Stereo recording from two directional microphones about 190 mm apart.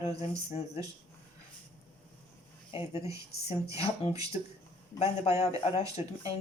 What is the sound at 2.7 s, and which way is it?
Speech, 30° left (ahead or behind).